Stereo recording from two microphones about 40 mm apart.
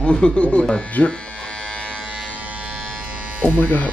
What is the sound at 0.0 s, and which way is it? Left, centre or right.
Speech, left.